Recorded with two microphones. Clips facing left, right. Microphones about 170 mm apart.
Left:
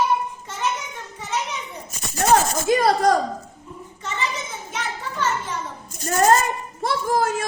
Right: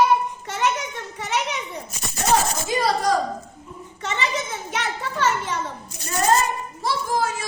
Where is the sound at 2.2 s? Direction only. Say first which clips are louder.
Left 3 dB; 50° left (ahead or behind).